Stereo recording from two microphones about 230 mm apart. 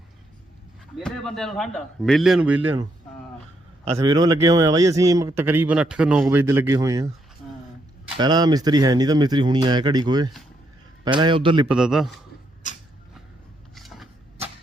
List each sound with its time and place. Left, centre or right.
1.0 s speech: centre
3.8 s a man's voice: right
8.1 s a man's voice: centre
11.7 s speech: centre
13.7 s a sound: centre